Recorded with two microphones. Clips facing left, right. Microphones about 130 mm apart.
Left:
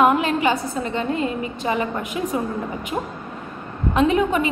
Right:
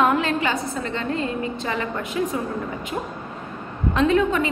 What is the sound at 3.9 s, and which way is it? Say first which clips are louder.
Speech: left 1 dB; 20° left (ahead or behind).